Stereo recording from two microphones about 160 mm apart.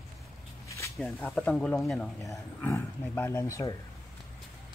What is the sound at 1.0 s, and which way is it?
Speech, 5° left (ahead or behind).